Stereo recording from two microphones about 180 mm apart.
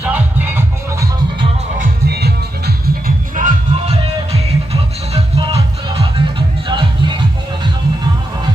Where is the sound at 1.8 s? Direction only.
65° right (ahead or behind).